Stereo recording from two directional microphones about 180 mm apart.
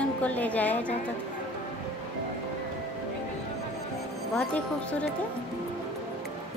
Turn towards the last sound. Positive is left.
turn(degrees=5)  # may be behind; listen again after turning